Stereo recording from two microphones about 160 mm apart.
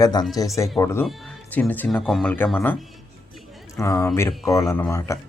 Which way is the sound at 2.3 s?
10° left (ahead or behind).